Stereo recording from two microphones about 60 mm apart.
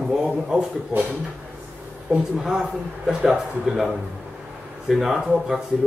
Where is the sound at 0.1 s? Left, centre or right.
Centre.